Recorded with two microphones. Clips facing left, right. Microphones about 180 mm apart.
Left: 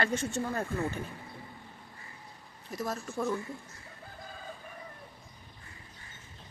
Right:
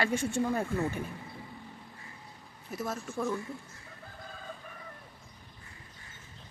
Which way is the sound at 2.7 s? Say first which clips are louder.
Even; 5° right (ahead or behind).